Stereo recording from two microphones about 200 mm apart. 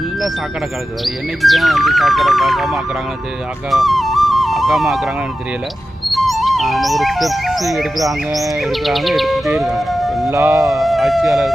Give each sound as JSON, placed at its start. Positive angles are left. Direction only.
{"t": 1.0, "sound": "speech", "side_deg": 0}
{"t": 3.7, "sound": "flute", "side_deg": 0}
{"t": 6.1, "sound": "speech", "side_deg": 0}
{"t": 10.3, "sound": "music", "side_deg": -15}
{"t": 10.7, "sound": "speech", "side_deg": 0}